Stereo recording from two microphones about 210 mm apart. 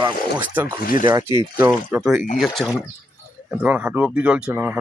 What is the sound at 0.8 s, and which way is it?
Speech, 40° left (ahead or behind).